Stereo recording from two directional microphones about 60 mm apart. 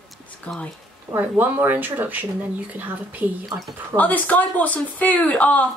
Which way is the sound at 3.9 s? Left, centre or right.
Left.